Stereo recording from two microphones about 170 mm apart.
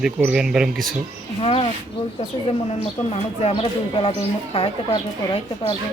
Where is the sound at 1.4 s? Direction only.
35° left (ahead or behind).